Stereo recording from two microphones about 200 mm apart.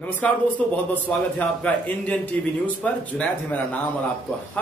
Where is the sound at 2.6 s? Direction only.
5° left (ahead or behind).